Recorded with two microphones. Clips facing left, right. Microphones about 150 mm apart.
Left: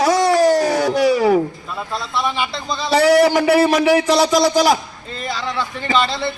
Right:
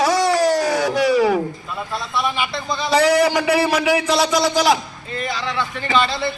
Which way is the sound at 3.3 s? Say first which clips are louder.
Left 4 dB; 45° left (ahead or behind).